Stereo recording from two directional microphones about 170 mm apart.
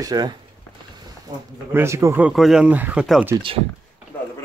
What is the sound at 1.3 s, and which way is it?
Speech, 25° right (ahead or behind).